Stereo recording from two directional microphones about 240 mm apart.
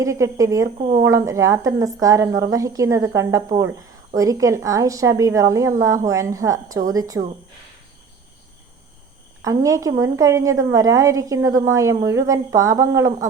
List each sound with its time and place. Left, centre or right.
0.0 s a woman's voice: centre
0.8 s speech: right
1.1 s a woman's voice: centre
9.4 s a woman's voice: centre